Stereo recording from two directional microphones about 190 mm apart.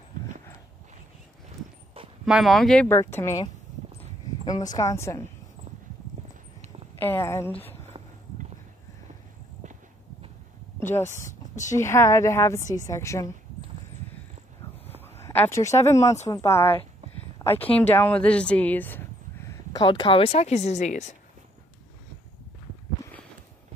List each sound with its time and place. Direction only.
2.2 s speech: centre (ahead or behind); by 3.4 s 15° left (ahead or behind)
4.7 s speech: 15° left (ahead or behind)
7.0 s speech: 10° left (ahead or behind)
10.8 s speech: 10° left (ahead or behind)
11.1 s speech: 40° left (ahead or behind)
11.7 s speech: 15° left (ahead or behind)
15.0 s speech: 15° left (ahead or behind)
17.4 s a sound: 15° left (ahead or behind)
17.7 s speech: 10° left (ahead or behind); by 21.2 s 40° left (ahead or behind)